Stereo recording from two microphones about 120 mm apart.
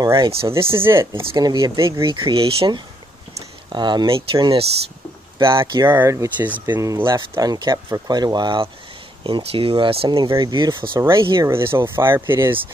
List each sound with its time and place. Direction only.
0.2 s speech: 50° right (ahead or behind)
0.5 s speech: 20° right (ahead or behind)
1.3 s speech: 35° right (ahead or behind)
2.0 s speech: 45° right (ahead or behind)
5.9 s speech: 20° right (ahead or behind); by 8.6 s 40° right (ahead or behind)
9.2 s speech: 50° right (ahead or behind)
10.4 s speech: 35° right (ahead or behind)
11.0 s speech: 25° right (ahead or behind)